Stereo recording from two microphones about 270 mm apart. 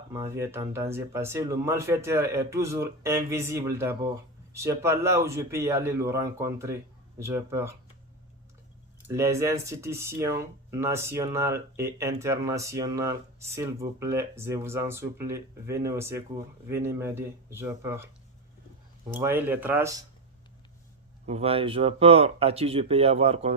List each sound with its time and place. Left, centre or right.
0.1 s speech: centre
9.0 s speech: centre
19.1 s speech: centre
21.2 s speech: right